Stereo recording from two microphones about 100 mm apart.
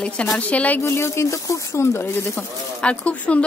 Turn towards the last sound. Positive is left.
turn(degrees=10)  # may be behind; listen again after turning